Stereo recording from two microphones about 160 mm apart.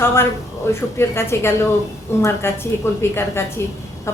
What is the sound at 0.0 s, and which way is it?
A woman's voice, 15° left (ahead or behind).